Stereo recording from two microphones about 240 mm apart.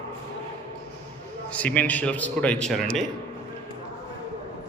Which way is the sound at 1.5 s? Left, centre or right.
Centre.